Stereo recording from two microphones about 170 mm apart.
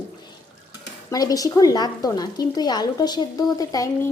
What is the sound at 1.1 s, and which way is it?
A woman's voice, 20° left (ahead or behind).